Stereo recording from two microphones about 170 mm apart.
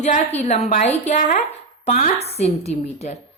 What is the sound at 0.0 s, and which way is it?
A woman's voice, 40° left (ahead or behind).